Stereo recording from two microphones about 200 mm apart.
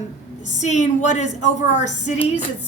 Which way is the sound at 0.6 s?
35° left (ahead or behind).